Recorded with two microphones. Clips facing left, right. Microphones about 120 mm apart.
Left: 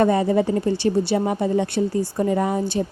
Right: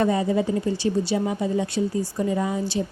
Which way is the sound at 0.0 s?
55° left (ahead or behind).